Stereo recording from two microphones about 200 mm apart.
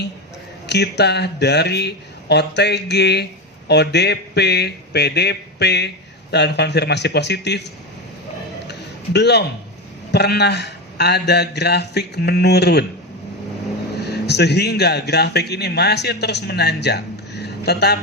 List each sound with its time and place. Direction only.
0.7 s a man's voice: 55° left (ahead or behind)
9.1 s a man's voice: 55° left (ahead or behind)
14.0 s a man's voice: 55° left (ahead or behind)